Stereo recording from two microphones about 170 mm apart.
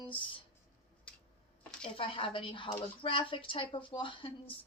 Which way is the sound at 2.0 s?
30° left (ahead or behind).